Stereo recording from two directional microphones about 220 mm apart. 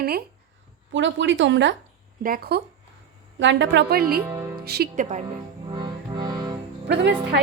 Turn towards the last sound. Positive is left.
turn(degrees=-50)  # may be behind; listen again after turning